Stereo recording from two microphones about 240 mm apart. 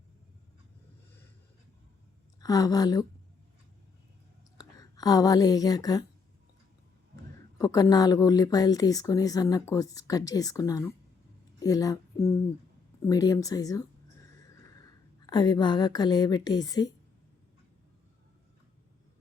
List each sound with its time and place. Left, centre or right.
2.4 s speech: centre
4.5 s speech: centre
7.6 s speech: centre
15.3 s speech: centre